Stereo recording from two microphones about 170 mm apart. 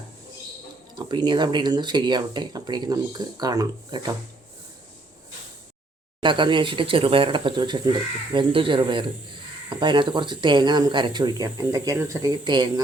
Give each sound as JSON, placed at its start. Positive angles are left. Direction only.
{"t": 0.9, "sound": "speech", "side_deg": -25}
{"t": 6.1, "sound": "speech", "side_deg": -30}